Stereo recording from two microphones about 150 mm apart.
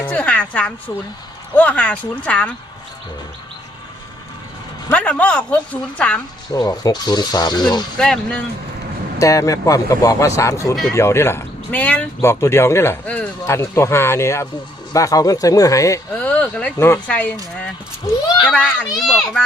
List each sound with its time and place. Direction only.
0.0 s a woman's voice: 10° left (ahead or behind)
4.9 s speech: 10° left (ahead or behind)
6.5 s speech: 25° left (ahead or behind)
7.9 s speech: 5° left (ahead or behind)
9.1 s speech: 20° left (ahead or behind)
16.2 s speech: 10° left (ahead or behind)